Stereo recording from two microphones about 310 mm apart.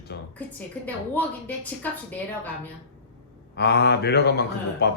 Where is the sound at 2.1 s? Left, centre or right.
Centre.